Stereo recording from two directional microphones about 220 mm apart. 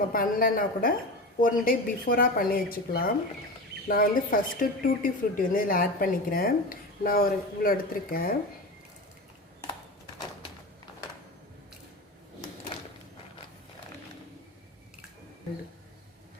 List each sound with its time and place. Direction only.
0.1 s speech: 40° left (ahead or behind)